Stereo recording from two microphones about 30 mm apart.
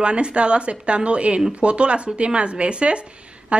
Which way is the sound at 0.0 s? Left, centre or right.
Right.